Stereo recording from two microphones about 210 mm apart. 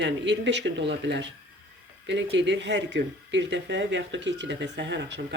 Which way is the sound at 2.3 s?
55° right (ahead or behind).